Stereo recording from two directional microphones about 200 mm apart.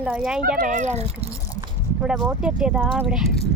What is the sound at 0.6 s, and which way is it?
Speech, 40° right (ahead or behind).